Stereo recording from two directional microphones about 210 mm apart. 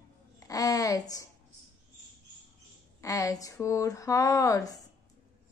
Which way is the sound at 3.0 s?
15° left (ahead or behind).